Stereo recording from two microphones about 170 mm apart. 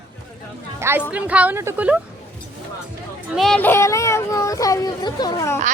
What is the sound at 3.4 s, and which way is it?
Speech, 5° left (ahead or behind).